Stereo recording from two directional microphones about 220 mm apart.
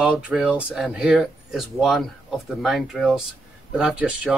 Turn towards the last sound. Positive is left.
turn(degrees=-5)  # may be behind; listen again after turning